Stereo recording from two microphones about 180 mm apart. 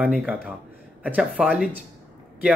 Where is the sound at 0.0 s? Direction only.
5° right (ahead or behind).